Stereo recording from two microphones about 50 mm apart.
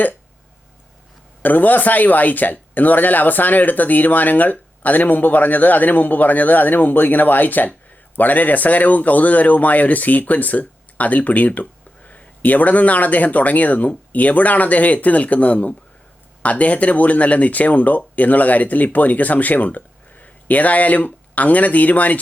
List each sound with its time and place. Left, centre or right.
1.4 s speech: left